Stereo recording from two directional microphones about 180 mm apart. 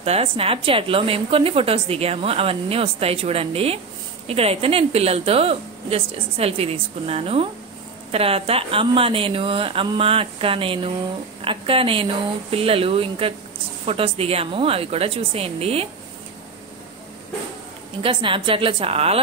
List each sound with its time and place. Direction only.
0.0 s a woman's voice: 35° right (ahead or behind)
18.0 s a woman's voice: 30° right (ahead or behind)